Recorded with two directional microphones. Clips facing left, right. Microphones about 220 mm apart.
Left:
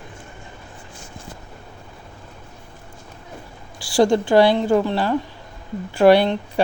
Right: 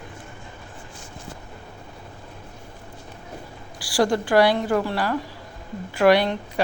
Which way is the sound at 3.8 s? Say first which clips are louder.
Left 5 dB; 25° left (ahead or behind).